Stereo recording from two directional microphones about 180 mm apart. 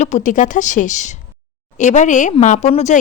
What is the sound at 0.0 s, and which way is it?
A woman's voice, 40° left (ahead or behind).